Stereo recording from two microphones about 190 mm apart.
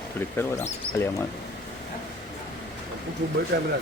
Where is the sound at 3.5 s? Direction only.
55° right (ahead or behind).